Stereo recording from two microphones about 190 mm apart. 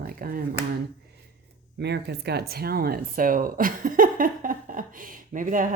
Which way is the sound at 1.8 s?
60° right (ahead or behind).